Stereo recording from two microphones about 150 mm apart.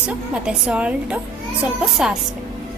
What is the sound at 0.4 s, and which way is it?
A woman's voice, 5° right (ahead or behind).